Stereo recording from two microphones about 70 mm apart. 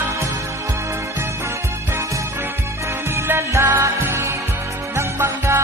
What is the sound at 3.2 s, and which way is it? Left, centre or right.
Music, right.